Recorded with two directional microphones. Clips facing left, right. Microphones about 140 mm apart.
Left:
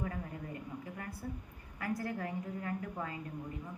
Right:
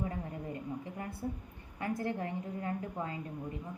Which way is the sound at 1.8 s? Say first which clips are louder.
Right 2 dB; 25° right (ahead or behind).